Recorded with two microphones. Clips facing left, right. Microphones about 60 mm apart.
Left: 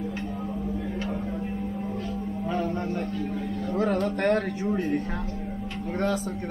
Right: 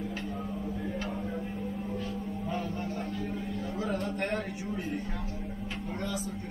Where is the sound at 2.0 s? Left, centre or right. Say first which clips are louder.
Left 4 dB; left.